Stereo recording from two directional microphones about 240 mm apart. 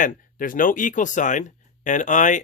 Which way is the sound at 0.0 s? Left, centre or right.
Left.